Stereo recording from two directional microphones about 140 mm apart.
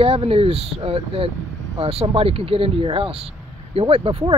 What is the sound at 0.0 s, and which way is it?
Speech, 40° right (ahead or behind).